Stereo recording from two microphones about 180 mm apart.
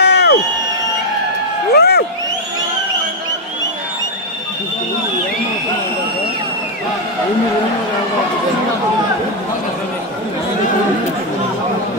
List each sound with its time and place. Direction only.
0.0 s crowd: 65° left (ahead or behind)
1.7 s crowd: 65° left (ahead or behind)